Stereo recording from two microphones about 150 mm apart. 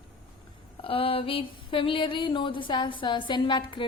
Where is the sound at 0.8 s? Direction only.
35° left (ahead or behind).